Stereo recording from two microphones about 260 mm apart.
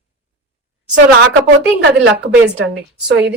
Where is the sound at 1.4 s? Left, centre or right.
Right.